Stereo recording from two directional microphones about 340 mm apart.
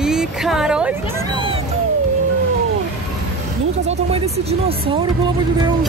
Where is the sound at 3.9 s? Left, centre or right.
Centre.